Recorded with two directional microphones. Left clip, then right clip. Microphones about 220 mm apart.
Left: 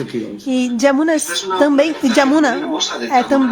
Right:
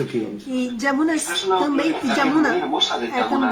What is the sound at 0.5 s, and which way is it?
Speech, 40° left (ahead or behind).